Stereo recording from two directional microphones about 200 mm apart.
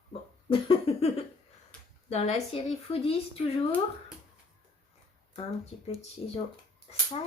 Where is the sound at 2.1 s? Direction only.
35° left (ahead or behind).